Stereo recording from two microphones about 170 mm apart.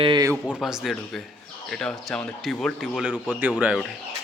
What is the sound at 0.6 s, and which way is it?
Speech, centre (ahead or behind).